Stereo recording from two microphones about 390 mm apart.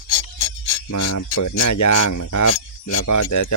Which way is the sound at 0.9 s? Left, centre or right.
Left.